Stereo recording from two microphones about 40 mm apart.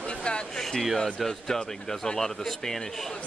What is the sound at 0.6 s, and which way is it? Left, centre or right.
Speech, centre.